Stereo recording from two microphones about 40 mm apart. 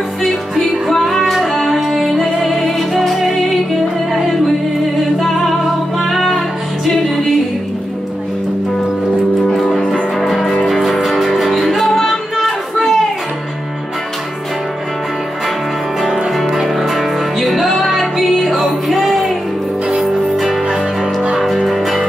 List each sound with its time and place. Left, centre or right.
0.2 s music: centre
5.3 s music: centre
9.6 s music: centre
12.4 s music: centre
16.3 s music: centre